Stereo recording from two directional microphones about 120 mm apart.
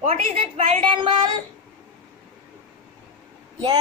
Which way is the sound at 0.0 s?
55° right (ahead or behind).